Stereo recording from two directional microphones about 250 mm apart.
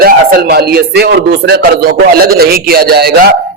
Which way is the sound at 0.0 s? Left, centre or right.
Right.